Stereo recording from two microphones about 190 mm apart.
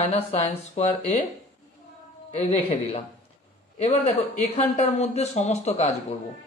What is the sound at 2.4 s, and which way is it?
Speech, 35° left (ahead or behind).